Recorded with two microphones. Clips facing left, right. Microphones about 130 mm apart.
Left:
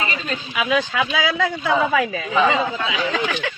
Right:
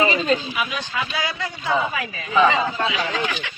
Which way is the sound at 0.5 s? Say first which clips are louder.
Left 6 dB; 90° left.